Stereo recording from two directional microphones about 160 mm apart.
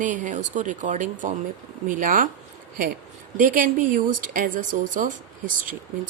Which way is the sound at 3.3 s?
55° right (ahead or behind).